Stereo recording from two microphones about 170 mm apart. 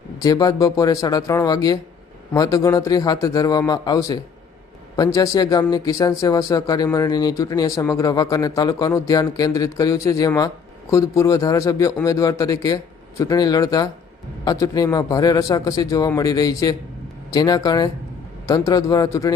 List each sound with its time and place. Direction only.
0.2 s speech: 20° left (ahead or behind)